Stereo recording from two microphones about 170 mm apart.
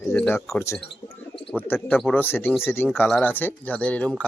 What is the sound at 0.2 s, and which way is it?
Speech, 10° left (ahead or behind).